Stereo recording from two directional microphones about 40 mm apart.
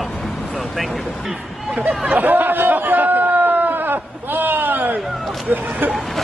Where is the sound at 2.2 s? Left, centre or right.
Right.